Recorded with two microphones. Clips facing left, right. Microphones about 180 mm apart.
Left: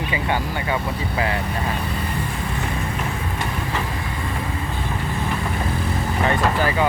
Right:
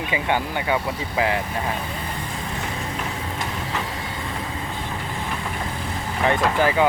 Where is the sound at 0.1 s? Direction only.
15° right (ahead or behind).